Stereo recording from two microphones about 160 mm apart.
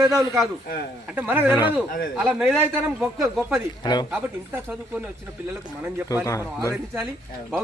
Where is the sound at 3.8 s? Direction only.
25° left (ahead or behind).